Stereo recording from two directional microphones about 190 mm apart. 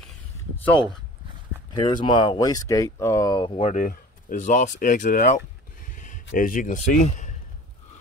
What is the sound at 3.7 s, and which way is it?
Speech, 45° left (ahead or behind).